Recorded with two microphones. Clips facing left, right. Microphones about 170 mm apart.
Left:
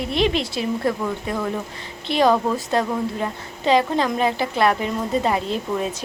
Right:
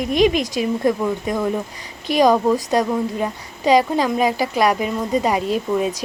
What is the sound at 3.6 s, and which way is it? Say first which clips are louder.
A woman's voice: right 3 dB; 10° right (ahead or behind).